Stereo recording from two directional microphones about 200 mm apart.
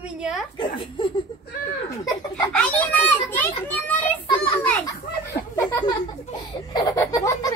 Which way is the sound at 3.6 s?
10° left (ahead or behind).